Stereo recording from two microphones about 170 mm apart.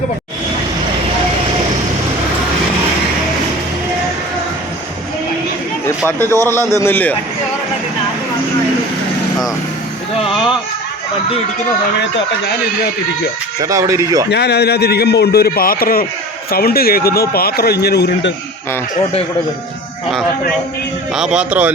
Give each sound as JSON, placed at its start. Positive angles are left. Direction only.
{"t": 6.1, "sound": "a man's voice", "side_deg": 15}
{"t": 13.6, "sound": "speech", "side_deg": -20}
{"t": 14.3, "sound": "a man's voice", "side_deg": 75}
{"t": 21.1, "sound": "speech", "side_deg": -5}